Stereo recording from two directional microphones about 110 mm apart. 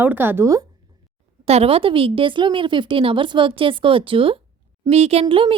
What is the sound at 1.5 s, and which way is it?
A woman's voice, 65° right (ahead or behind).